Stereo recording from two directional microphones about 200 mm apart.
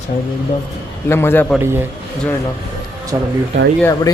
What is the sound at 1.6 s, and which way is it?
Speech, 10° right (ahead or behind).